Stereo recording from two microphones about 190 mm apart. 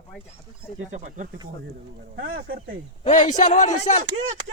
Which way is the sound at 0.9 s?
40° right (ahead or behind).